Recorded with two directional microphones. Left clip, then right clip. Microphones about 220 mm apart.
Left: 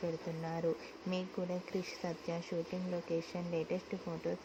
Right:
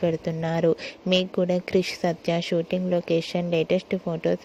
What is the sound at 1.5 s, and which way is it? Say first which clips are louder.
Speech: right 16 dB; 40° right (ahead or behind).